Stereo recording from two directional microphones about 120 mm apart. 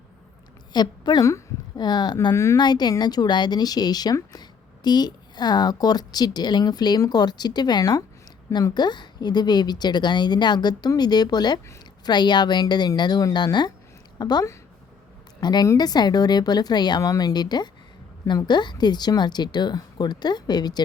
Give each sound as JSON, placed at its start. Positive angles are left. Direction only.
{"t": 0.7, "sound": "a woman's voice", "side_deg": 35}
{"t": 2.3, "sound": "a woman's voice", "side_deg": 25}
{"t": 2.6, "sound": "a woman's voice", "side_deg": 35}